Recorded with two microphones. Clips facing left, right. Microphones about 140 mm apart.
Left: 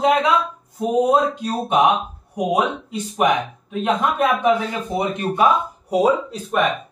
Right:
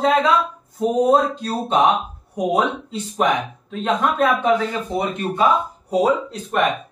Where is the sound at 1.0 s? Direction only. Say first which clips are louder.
Even; 15° left (ahead or behind).